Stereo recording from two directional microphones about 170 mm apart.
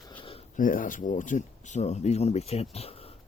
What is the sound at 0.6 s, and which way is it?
Speech, 50° left (ahead or behind).